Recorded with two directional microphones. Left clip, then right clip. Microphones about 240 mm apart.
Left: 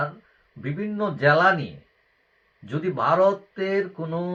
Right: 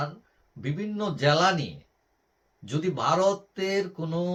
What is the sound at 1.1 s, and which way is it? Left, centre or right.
Speech, centre.